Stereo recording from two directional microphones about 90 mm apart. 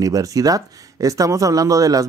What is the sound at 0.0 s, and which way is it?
Speech, 40° right (ahead or behind).